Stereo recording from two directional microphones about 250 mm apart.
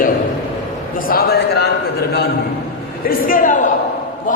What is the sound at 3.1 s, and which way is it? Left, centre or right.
Speech, left.